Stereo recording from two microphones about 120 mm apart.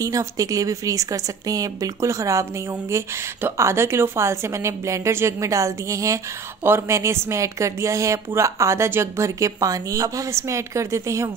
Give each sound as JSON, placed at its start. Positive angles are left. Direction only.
{"t": 0.0, "sound": "a woman's voice", "side_deg": -30}
{"t": 3.4, "sound": "a woman's voice", "side_deg": -20}